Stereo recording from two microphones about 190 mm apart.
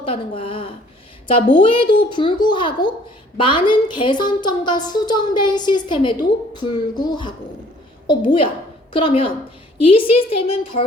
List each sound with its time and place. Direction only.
0.0 s a woman's voice: 30° left (ahead or behind)